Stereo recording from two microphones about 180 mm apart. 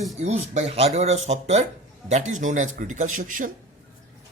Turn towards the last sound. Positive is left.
turn(degrees=-45)  # may be behind; listen again after turning